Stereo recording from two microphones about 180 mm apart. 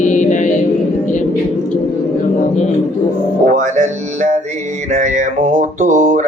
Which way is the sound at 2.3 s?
40° left (ahead or behind).